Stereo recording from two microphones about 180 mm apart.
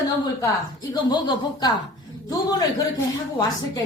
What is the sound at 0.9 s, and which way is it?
A woman's voice, 25° left (ahead or behind).